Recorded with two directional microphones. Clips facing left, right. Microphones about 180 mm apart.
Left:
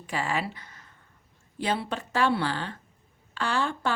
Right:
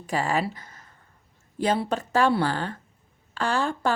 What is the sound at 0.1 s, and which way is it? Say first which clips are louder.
A woman's voice: right 4 dB; 40° right (ahead or behind).